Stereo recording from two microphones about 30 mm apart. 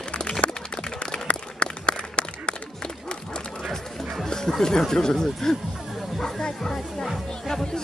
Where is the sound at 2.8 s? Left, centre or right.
Left.